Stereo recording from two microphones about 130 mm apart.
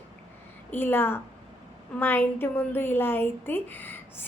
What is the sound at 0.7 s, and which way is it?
A woman's voice, 15° left (ahead or behind).